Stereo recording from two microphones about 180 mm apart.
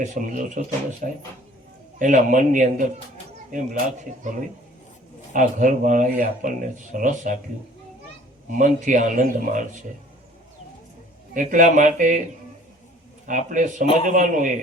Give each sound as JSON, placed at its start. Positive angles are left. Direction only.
{"t": 0.0, "sound": "speech", "side_deg": -45}
{"t": 8.5, "sound": "speech", "side_deg": -45}
{"t": 11.3, "sound": "speech", "side_deg": -45}
{"t": 13.2, "sound": "speech", "side_deg": -45}